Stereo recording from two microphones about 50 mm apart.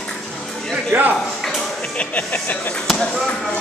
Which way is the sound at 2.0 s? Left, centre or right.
Left.